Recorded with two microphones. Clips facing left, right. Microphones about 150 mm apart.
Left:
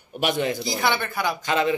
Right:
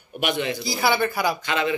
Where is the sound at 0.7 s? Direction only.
5° right (ahead or behind).